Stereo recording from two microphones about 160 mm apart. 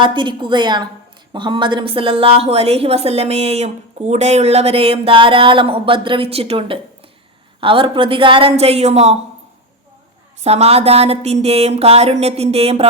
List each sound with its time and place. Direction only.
0.0 s a woman's voice: 30° right (ahead or behind)
10.4 s a woman's voice: 40° right (ahead or behind)